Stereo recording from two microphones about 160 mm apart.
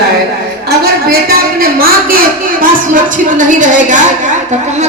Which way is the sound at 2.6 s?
55° right (ahead or behind).